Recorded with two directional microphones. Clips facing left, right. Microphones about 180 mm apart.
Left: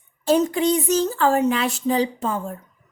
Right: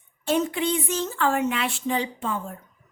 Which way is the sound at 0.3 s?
40° left (ahead or behind).